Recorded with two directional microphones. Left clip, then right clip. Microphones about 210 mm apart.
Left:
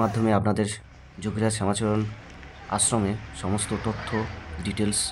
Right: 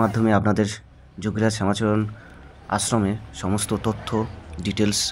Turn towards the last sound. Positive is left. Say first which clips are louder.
# right 5 dB
turn(degrees=-10)  # may be behind; listen again after turning